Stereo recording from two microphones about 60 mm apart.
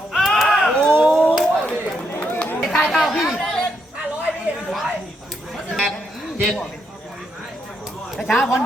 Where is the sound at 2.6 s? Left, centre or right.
Centre.